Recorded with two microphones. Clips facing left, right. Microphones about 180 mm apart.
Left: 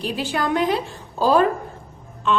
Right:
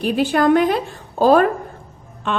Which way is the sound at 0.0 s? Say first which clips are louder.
Right 8 dB; 55° right (ahead or behind).